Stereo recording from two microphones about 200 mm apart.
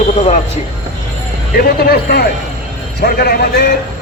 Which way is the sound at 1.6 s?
50° left (ahead or behind).